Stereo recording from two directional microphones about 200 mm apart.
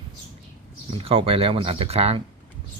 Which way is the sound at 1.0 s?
30° right (ahead or behind).